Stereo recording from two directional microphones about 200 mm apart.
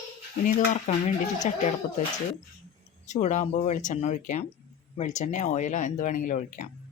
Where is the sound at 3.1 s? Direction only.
40° left (ahead or behind).